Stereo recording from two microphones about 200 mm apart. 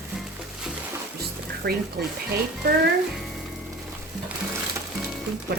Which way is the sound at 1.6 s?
50° right (ahead or behind).